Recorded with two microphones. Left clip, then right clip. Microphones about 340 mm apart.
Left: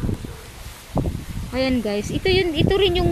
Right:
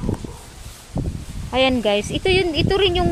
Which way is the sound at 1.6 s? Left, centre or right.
Centre.